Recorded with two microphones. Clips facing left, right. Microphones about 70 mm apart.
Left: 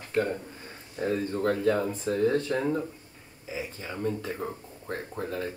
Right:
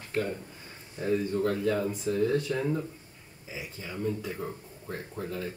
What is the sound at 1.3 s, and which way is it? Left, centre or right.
Speech, left.